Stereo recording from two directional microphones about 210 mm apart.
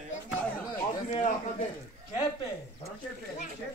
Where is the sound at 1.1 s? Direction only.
35° left (ahead or behind).